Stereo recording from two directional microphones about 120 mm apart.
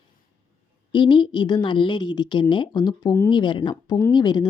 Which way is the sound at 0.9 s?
40° left (ahead or behind).